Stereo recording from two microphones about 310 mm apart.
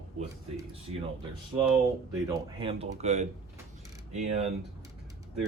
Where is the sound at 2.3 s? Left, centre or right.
Centre.